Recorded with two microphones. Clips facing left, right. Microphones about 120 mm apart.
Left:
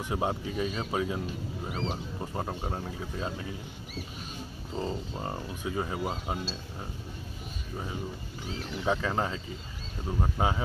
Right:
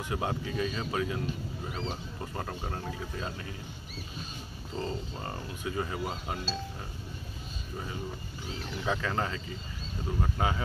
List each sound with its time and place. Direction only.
0.1 s speech: 20° left (ahead or behind)
4.7 s speech: 15° left (ahead or behind)
8.8 s speech: 15° left (ahead or behind)